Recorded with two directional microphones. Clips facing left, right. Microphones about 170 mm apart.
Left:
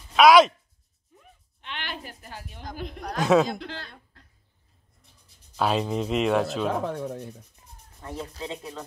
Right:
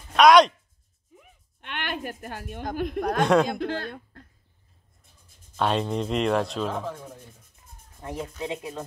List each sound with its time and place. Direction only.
0.1 s a sound: 5° left (ahead or behind)
1.6 s a woman's voice: 55° right (ahead or behind)
3.2 s speech: 5° left (ahead or behind)
3.4 s speech: 50° right (ahead or behind)
5.6 s speech: 5° left (ahead or behind)
6.7 s speech: 65° left (ahead or behind)
8.0 s speech: 20° right (ahead or behind)